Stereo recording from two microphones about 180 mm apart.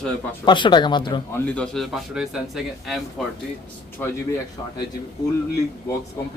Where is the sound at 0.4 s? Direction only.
25° left (ahead or behind).